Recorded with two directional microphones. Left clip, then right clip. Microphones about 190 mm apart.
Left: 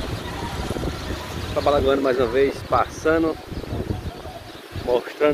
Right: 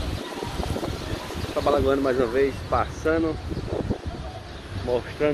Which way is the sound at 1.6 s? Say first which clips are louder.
Left 3 dB; 10° left (ahead or behind).